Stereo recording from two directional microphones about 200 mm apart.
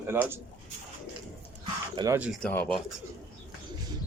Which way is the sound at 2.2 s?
Centre (ahead or behind).